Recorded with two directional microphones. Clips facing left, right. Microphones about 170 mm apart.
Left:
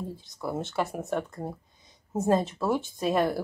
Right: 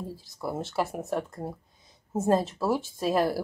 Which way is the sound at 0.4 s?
Centre (ahead or behind).